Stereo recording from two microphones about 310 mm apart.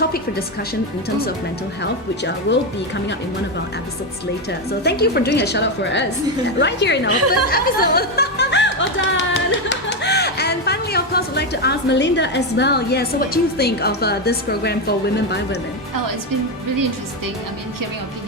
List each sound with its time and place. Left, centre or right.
1.8 s a woman's voice: left
4.8 s a woman's voice: left
7.1 s speech: right
7.5 s speech: left